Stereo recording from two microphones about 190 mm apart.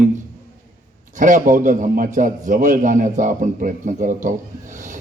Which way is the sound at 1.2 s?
40° right (ahead or behind).